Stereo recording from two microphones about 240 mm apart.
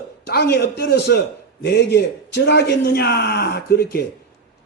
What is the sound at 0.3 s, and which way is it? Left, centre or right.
Speech, left.